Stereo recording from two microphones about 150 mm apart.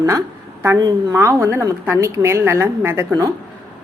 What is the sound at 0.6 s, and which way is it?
Speech, 20° right (ahead or behind).